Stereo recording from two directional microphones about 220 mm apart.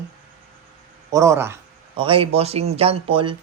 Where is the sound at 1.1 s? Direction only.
15° right (ahead or behind).